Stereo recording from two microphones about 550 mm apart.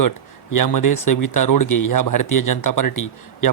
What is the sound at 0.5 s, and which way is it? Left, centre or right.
Speech, left.